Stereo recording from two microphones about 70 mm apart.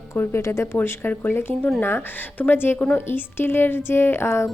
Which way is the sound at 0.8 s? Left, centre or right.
Left.